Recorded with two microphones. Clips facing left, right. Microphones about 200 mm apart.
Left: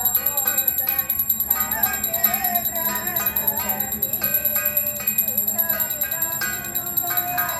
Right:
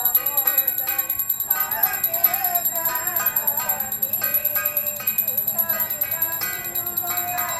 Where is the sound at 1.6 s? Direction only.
5° left (ahead or behind).